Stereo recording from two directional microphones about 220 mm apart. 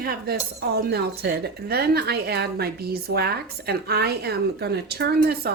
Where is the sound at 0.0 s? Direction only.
45° right (ahead or behind).